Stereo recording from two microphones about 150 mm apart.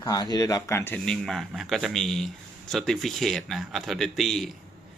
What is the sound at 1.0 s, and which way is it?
Speech, centre (ahead or behind).